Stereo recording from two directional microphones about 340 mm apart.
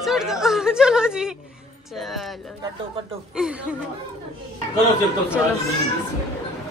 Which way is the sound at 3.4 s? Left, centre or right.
Centre.